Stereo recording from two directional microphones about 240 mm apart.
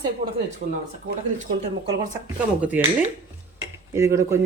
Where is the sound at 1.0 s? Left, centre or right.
Right.